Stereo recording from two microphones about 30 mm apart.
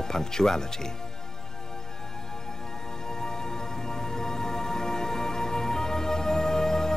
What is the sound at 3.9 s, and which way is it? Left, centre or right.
Music, centre.